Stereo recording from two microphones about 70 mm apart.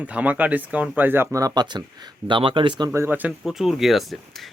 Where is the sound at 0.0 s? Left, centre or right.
Centre.